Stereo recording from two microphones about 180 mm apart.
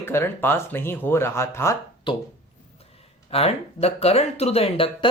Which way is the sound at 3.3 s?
35° left (ahead or behind).